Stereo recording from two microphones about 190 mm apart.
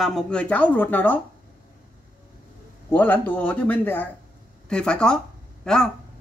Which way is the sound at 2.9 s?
10° left (ahead or behind).